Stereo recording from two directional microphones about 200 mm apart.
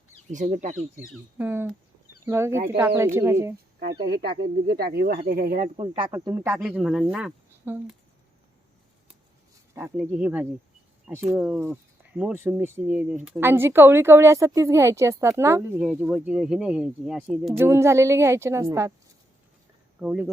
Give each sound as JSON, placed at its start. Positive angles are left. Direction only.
{"t": 0.3, "sound": "speech", "side_deg": -40}
{"t": 1.4, "sound": "speech", "side_deg": -10}
{"t": 3.8, "sound": "speech", "side_deg": -55}
{"t": 5.7, "sound": "speech", "side_deg": -30}
{"t": 6.1, "sound": "speech", "side_deg": -15}
{"t": 9.7, "sound": "speech", "side_deg": -10}
{"t": 20.0, "sound": "speech", "side_deg": -5}